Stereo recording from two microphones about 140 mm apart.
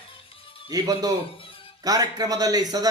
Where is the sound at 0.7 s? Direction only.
25° right (ahead or behind).